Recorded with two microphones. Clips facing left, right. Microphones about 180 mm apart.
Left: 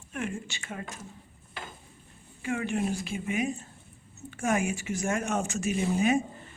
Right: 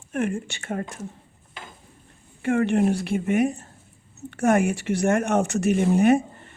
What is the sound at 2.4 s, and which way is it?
Speech, 60° right (ahead or behind).